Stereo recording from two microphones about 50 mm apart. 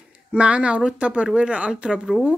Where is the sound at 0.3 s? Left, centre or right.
Right.